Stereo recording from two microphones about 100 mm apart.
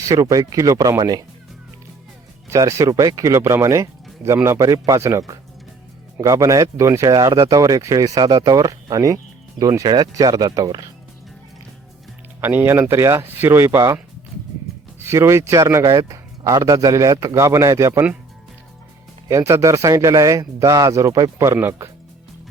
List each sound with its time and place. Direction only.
0.1 s speech: 35° right (ahead or behind)
2.5 s speech: 30° right (ahead or behind)
7.1 s speech: 40° right (ahead or behind)
12.4 s speech: 20° right (ahead or behind)
19.3 s speech: 30° right (ahead or behind)